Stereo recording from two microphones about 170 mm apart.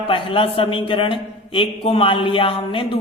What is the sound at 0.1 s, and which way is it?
A man's voice, 30° left (ahead or behind).